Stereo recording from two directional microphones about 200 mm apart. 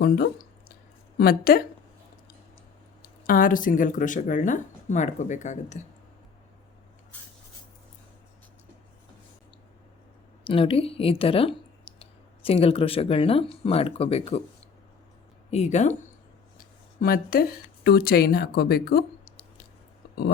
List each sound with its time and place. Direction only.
1.2 s speech: 50° left (ahead or behind)
3.0 s speech: 45° left (ahead or behind)
10.4 s speech: 25° left (ahead or behind)
15.4 s speech: 35° left (ahead or behind)
16.6 s a sound: 45° left (ahead or behind)
17.8 s speech: 50° left (ahead or behind)